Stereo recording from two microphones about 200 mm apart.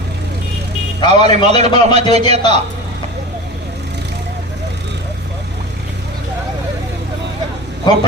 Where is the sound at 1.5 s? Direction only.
30° right (ahead or behind).